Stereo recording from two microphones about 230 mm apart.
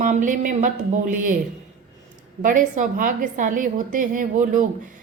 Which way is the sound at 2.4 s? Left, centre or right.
Right.